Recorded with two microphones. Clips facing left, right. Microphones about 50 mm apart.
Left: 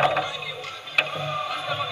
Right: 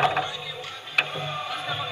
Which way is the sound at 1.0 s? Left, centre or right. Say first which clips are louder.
Left 3 dB; right.